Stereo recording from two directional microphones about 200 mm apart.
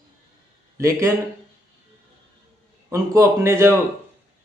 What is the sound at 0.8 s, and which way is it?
Speech, 15° right (ahead or behind).